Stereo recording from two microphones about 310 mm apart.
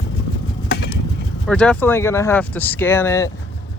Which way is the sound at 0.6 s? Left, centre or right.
Left.